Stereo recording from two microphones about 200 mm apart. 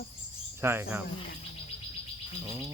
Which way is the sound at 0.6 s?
10° right (ahead or behind).